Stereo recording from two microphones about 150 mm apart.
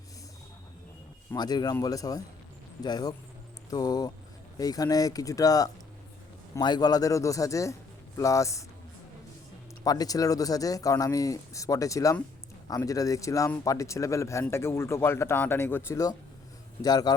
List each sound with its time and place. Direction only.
1.3 s speech: 25° left (ahead or behind)
9.8 s speech: 25° left (ahead or behind)